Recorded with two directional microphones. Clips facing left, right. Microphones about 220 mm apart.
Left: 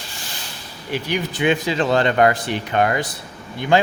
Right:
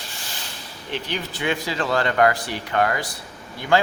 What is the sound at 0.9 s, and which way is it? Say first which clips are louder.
Speech: left 5 dB; 10° left (ahead or behind).